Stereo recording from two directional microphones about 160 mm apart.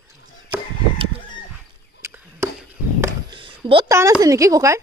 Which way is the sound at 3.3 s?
30° right (ahead or behind).